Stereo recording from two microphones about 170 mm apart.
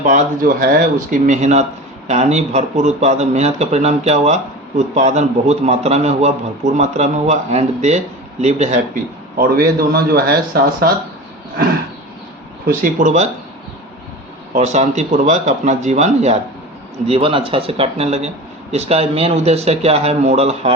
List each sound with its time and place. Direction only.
0.0 s speech: 45° right (ahead or behind)
0.4 s speech: 60° right (ahead or behind); by 8.8 s 40° right (ahead or behind)
9.4 s speech: 65° right (ahead or behind)
12.6 s speech: 50° right (ahead or behind)
14.5 s speech: 45° right (ahead or behind)